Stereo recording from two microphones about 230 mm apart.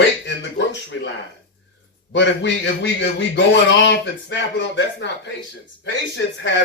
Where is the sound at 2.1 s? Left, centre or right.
Left.